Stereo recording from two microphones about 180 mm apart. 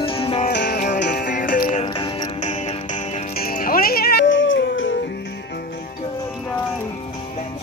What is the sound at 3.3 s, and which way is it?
Music, 55° left (ahead or behind).